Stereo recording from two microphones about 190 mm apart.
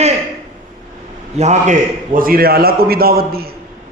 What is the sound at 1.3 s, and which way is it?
A man's voice, 35° right (ahead or behind).